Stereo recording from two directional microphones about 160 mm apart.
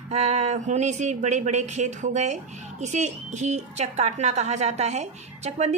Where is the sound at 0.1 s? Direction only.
45° right (ahead or behind).